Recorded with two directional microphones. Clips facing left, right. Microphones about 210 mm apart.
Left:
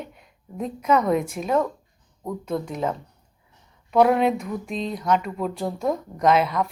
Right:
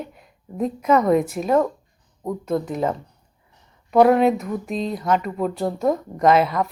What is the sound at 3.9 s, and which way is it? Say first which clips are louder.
Speech: right 3 dB; centre (ahead or behind).